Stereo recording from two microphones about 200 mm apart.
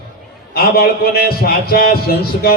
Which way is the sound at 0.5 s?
50° left (ahead or behind).